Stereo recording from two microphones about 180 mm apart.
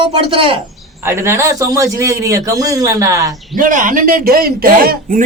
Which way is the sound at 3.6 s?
45° right (ahead or behind).